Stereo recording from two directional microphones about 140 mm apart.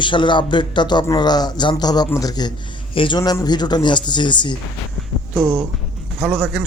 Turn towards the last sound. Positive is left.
turn(degrees=-5)  # may be behind; listen again after turning